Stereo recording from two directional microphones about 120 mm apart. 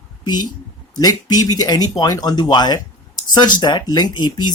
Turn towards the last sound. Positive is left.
turn(degrees=35)  # may be behind; listen again after turning